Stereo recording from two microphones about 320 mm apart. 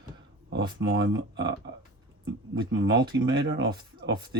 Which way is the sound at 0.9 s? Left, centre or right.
Right.